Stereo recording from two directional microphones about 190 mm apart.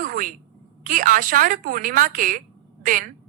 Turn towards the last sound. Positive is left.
turn(degrees=-45)  # may be behind; listen again after turning